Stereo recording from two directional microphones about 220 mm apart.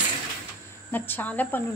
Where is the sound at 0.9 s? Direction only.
10° left (ahead or behind).